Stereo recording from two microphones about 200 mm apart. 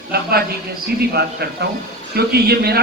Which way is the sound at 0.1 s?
50° right (ahead or behind).